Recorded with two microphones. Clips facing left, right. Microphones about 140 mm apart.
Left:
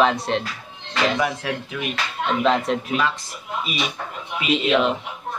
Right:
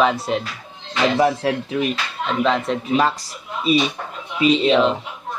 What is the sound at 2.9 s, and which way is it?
Speech, 40° right (ahead or behind).